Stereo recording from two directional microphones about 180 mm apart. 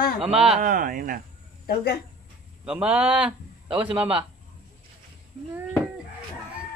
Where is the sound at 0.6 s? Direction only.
50° right (ahead or behind).